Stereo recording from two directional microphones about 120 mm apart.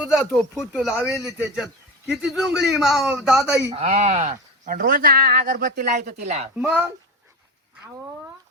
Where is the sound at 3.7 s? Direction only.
60° right (ahead or behind).